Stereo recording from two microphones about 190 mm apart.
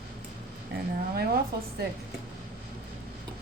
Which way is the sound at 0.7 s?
55° right (ahead or behind).